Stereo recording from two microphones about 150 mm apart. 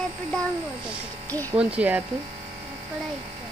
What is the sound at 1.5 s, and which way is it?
Speech, 10° right (ahead or behind).